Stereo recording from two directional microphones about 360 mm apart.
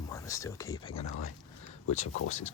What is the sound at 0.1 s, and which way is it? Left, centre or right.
Speech, centre.